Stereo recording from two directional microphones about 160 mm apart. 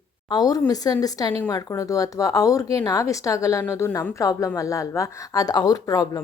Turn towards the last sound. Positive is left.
turn(degrees=20)  # may be behind; listen again after turning